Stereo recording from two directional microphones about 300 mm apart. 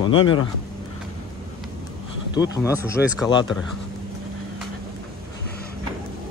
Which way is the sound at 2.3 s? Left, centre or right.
Centre.